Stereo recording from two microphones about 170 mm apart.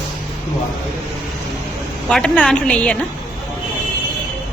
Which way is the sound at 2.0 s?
5° left (ahead or behind).